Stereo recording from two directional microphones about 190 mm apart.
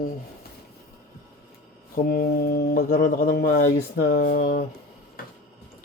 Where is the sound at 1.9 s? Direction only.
50° left (ahead or behind).